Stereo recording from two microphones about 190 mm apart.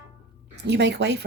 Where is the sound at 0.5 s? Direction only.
65° right (ahead or behind).